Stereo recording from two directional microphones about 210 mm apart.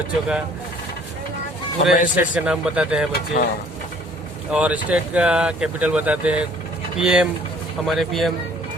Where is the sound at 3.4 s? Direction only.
45° left (ahead or behind).